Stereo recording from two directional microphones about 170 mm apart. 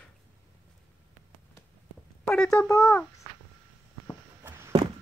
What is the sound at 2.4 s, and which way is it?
Speech, 20° left (ahead or behind).